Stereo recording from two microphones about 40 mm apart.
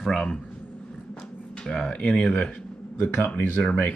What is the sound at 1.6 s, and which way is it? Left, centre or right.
Speech, centre.